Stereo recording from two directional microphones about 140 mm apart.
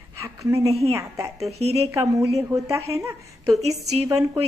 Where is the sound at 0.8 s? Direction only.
20° right (ahead or behind).